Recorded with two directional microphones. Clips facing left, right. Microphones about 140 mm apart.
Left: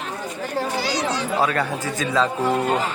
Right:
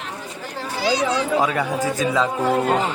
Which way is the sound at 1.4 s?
15° right (ahead or behind).